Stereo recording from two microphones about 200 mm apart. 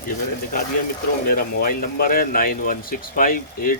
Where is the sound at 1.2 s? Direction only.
45° left (ahead or behind).